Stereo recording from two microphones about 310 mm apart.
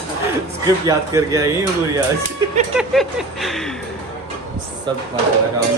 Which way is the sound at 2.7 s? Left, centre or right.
Centre.